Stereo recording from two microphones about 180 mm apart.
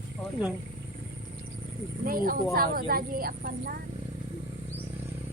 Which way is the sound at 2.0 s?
50° right (ahead or behind).